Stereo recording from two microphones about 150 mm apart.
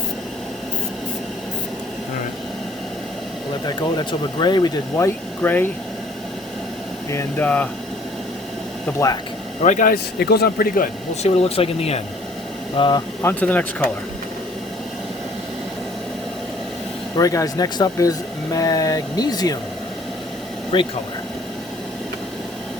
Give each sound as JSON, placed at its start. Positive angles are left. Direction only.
{"t": 3.7, "sound": "speech", "side_deg": 30}
{"t": 7.1, "sound": "speech", "side_deg": 20}
{"t": 9.6, "sound": "speech", "side_deg": 55}
{"t": 11.1, "sound": "speech", "side_deg": 45}
{"t": 12.7, "sound": "speech", "side_deg": 30}
{"t": 13.2, "sound": "speech", "side_deg": 10}
{"t": 17.2, "sound": "speech", "side_deg": 25}
{"t": 20.7, "sound": "speech", "side_deg": 35}